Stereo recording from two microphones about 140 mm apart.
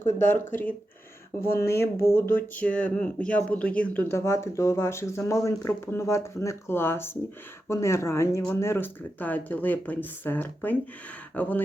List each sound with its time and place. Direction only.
0.0 s speech: 15° left (ahead or behind)